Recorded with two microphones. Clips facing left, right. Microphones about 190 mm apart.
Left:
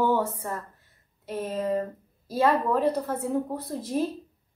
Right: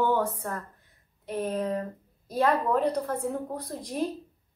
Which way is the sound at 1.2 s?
Centre (ahead or behind).